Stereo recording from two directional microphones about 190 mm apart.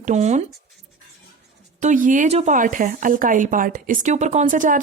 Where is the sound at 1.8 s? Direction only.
40° right (ahead or behind).